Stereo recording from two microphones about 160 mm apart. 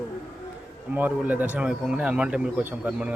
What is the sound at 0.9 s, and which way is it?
Speech, 10° right (ahead or behind).